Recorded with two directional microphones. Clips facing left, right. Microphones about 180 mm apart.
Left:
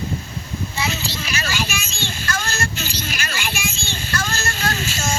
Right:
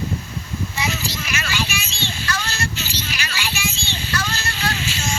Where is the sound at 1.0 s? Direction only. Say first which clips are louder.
Left 1 dB; 30° left (ahead or behind).